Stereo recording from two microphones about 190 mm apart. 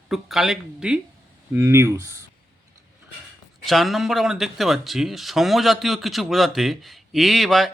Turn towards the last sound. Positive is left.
turn(degrees=0)  # may be behind; listen again after turning